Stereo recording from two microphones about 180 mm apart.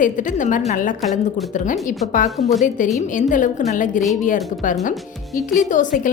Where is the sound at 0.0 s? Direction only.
45° left (ahead or behind).